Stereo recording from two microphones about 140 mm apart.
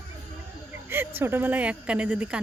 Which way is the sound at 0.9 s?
15° right (ahead or behind).